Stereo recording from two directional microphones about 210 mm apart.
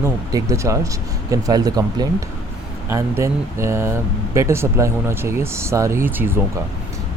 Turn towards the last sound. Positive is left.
turn(degrees=-10)  # may be behind; listen again after turning